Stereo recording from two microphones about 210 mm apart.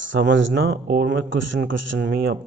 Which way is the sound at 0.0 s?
60° right (ahead or behind).